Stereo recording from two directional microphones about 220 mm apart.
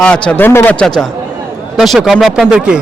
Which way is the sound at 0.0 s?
5° left (ahead or behind).